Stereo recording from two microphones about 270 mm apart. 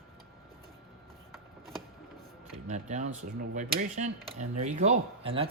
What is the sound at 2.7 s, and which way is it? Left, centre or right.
Speech, right.